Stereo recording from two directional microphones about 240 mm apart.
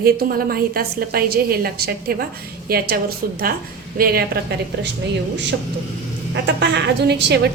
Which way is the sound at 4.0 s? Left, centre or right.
Right.